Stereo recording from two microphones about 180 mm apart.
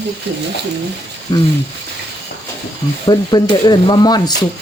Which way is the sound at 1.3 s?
20° left (ahead or behind).